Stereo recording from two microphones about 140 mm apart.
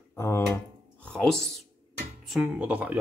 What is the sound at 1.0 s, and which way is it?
Speech, 5° left (ahead or behind).